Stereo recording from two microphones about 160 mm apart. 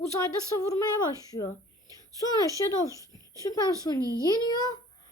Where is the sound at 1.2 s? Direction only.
25° left (ahead or behind).